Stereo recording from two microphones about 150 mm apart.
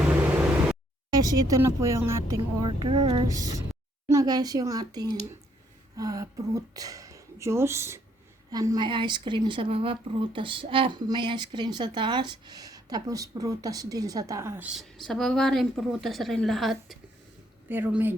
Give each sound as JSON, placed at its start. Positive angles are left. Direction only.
{"t": 1.2, "sound": "speech", "side_deg": -25}
{"t": 2.6, "sound": "speech", "side_deg": -30}
{"t": 17.7, "sound": "speech", "side_deg": -15}